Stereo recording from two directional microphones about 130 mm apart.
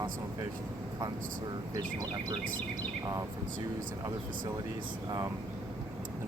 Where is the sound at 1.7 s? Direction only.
30° right (ahead or behind).